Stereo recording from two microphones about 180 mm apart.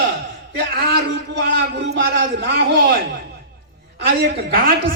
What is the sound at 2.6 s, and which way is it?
Speech, 55° right (ahead or behind).